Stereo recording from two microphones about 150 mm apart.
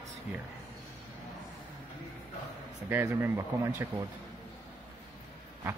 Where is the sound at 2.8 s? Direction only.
15° right (ahead or behind).